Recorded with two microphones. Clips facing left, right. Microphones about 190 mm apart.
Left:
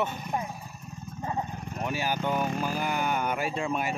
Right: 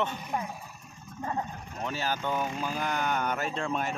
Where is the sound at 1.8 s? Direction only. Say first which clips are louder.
Left 2 dB; 10° left (ahead or behind).